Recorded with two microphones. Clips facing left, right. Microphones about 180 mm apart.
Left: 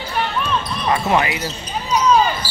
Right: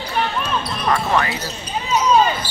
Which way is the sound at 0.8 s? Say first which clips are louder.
Left 1 dB; 20° left (ahead or behind).